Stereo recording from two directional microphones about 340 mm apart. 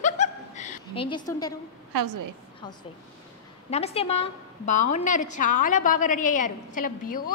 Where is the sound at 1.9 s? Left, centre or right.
Right.